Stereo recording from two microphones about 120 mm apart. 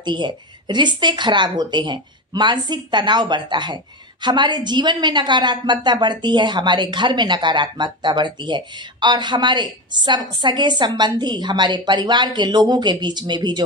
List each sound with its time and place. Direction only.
0.0 s speech: 40° right (ahead or behind)